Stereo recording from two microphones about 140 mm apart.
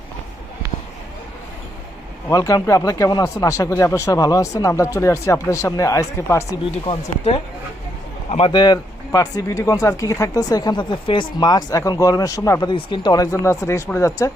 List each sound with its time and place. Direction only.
2.3 s speech: 25° left (ahead or behind)
6.7 s speech: 40° left (ahead or behind)
8.5 s speech: 30° left (ahead or behind)
12.7 s speech: 35° left (ahead or behind)